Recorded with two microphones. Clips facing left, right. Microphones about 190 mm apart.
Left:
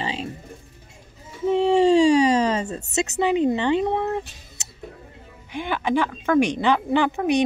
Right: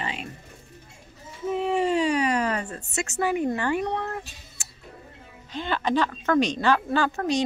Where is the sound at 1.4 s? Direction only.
25° left (ahead or behind).